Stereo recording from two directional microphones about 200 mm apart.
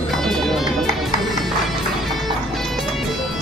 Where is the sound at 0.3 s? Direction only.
Centre (ahead or behind).